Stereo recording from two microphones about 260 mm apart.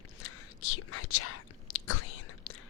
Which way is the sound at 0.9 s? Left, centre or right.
Left.